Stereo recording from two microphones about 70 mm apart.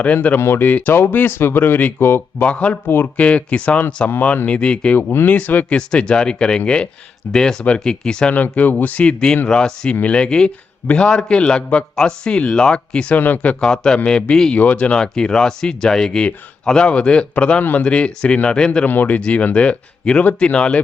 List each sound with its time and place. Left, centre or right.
0.0 s speech: centre
0.3 s speech: left
2.5 s speech: centre
2.8 s speech: left
3.2 s speech: centre
4.9 s speech: left
5.6 s speech: centre
8.5 s speech: left
18.9 s speech: left